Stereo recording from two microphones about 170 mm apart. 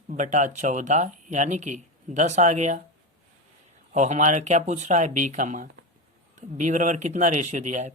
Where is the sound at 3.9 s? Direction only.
45° right (ahead or behind).